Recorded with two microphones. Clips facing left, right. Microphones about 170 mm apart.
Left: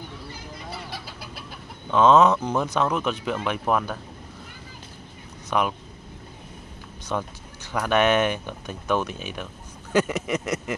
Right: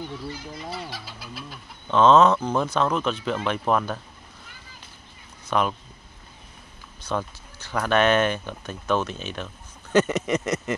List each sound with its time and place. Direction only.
0.8 s chicken: 55° left (ahead or behind)
1.9 s speech: 15° left (ahead or behind)
5.5 s speech: 10° left (ahead or behind)
7.1 s speech: 15° left (ahead or behind)